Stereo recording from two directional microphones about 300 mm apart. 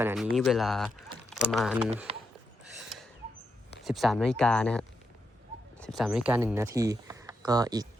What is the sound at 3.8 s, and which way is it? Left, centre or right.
Speech, centre.